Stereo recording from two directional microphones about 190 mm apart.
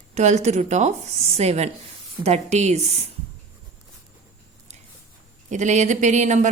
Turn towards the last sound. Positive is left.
turn(degrees=-40)  # may be behind; listen again after turning